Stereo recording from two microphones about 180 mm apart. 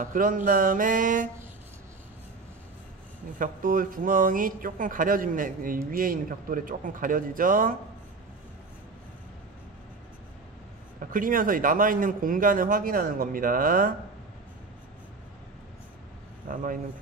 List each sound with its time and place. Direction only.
0.0 s speech: 50° right (ahead or behind)
3.3 s speech: 50° right (ahead or behind)
11.0 s speech: 50° right (ahead or behind)
16.5 s speech: 50° right (ahead or behind)